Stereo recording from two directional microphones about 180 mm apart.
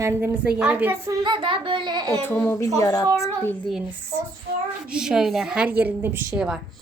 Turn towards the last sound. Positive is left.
turn(degrees=-5)  # may be behind; listen again after turning